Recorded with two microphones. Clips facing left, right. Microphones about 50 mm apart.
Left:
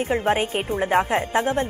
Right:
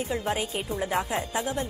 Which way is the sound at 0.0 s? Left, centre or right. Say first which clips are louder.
Left 7 dB; left.